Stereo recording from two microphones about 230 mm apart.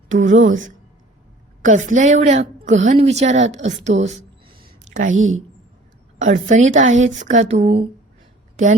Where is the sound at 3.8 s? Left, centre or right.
Right.